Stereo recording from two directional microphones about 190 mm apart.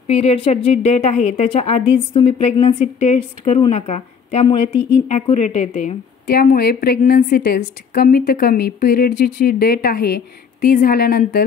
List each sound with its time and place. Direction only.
0.0 s a woman's voice: 35° left (ahead or behind)
6.2 s a woman's voice: 55° left (ahead or behind)